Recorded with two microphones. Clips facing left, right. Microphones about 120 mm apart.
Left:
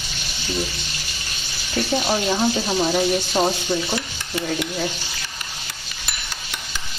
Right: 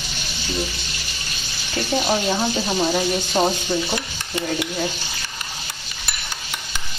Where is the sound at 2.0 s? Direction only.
Centre (ahead or behind).